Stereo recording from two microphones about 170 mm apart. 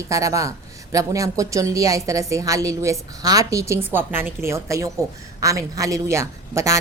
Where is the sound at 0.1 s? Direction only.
20° right (ahead or behind).